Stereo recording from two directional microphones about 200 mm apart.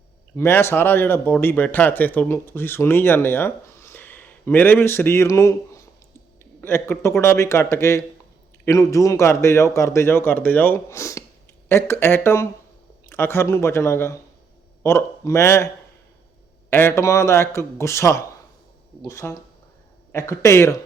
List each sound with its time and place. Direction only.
0.3 s speech: 10° left (ahead or behind)